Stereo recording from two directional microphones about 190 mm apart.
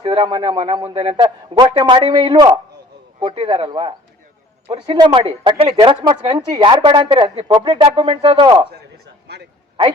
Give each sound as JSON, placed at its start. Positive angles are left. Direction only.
{"t": 0.0, "sound": "a woman's voice", "side_deg": -30}
{"t": 9.2, "sound": "a man's voice", "side_deg": -65}